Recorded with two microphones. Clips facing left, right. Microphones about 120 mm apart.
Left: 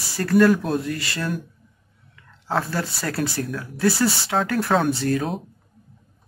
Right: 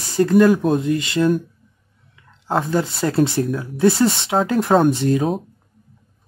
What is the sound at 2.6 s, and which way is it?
Speech, 20° right (ahead or behind).